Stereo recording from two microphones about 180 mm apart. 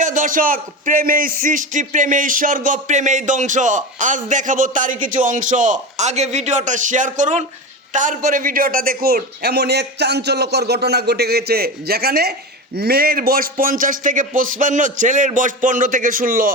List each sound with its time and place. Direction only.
0.0 s a man's voice: 45° right (ahead or behind)